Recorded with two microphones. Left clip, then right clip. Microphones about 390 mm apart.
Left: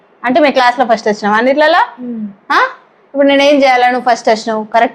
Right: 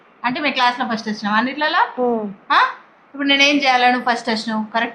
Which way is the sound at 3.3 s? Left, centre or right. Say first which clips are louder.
Left 6 dB; left.